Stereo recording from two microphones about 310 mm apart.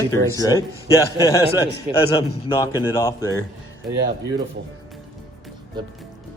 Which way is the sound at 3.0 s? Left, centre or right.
Centre.